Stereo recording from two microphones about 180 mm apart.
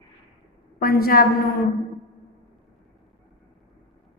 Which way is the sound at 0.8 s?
55° left (ahead or behind).